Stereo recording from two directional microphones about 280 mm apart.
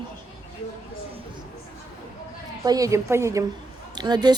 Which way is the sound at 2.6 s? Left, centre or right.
Centre.